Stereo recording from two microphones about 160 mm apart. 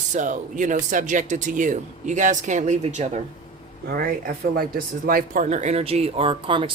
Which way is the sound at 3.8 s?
80° right.